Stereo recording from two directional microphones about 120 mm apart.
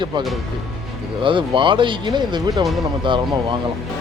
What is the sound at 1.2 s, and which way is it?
Speech, 45° right (ahead or behind).